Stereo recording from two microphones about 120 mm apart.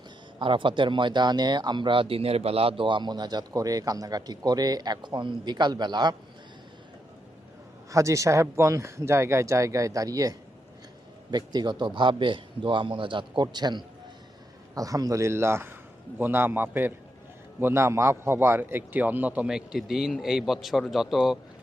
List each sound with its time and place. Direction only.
0.3 s speech: 45° right (ahead or behind)
7.9 s a man's voice: 25° right (ahead or behind); by 21.3 s 5° right (ahead or behind)